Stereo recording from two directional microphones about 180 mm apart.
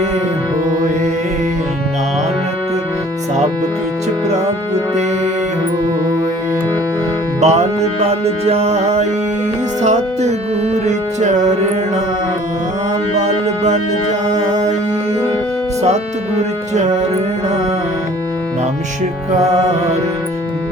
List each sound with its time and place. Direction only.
7.4 s music: 35° right (ahead or behind)
13.1 s music: 40° right (ahead or behind)
19.4 s music: 40° right (ahead or behind)